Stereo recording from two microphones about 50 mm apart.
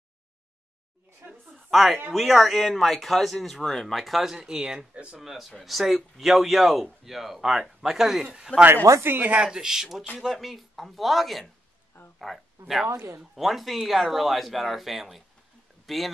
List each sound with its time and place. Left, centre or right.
1.5 s speech: centre
4.5 s speech: centre
5.2 s speech: centre
8.5 s speech: left
9.0 s speech: right
9.3 s speech: centre
12.8 s speech: right
13.2 s speech: centre